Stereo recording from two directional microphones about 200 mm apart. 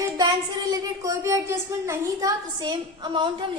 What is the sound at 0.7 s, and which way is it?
A woman's voice, 15° right (ahead or behind).